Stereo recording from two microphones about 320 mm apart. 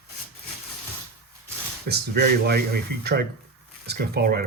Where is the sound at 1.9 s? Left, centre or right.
Right.